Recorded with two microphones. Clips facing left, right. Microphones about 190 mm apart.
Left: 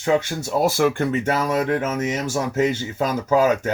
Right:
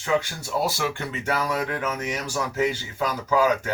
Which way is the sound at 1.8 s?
45° left (ahead or behind).